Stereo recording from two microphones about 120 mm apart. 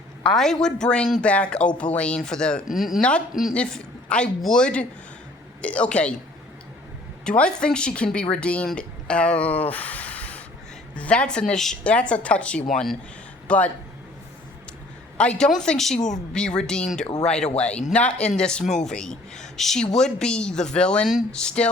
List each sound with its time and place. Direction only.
0.3 s a woman's voice: 5° left (ahead or behind)
3.5 s a woman's voice: 10° left (ahead or behind)
7.3 s a woman's voice: 10° left (ahead or behind)
15.2 s a woman's voice: 5° left (ahead or behind)
18.6 s speech: 90° left
18.9 s a woman's voice: 5° left (ahead or behind)